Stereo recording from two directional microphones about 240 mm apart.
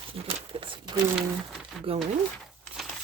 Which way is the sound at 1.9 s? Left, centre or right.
Right.